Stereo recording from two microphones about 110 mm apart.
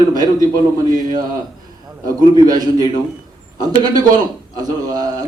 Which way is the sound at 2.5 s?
35° right (ahead or behind).